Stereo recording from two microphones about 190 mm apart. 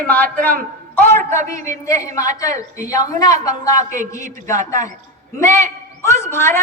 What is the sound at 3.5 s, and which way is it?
A woman's voice, 20° left (ahead or behind).